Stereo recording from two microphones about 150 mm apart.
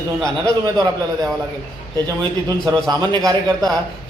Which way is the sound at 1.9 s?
25° right (ahead or behind).